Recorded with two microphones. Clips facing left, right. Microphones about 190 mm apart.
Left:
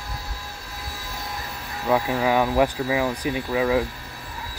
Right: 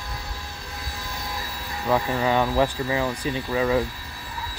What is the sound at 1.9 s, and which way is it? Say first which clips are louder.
Speech: left 1 dB; 5° left (ahead or behind).